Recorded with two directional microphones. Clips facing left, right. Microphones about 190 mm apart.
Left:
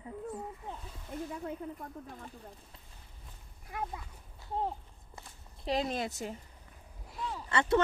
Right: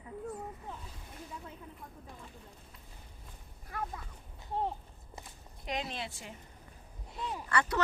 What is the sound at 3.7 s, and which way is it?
Speech, 15° left (ahead or behind).